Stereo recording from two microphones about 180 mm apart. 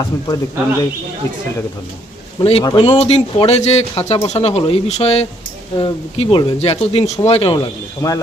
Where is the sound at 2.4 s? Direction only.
30° left (ahead or behind).